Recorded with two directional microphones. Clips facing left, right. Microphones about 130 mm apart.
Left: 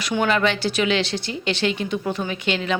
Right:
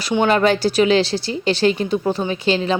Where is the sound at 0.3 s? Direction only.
40° right (ahead or behind).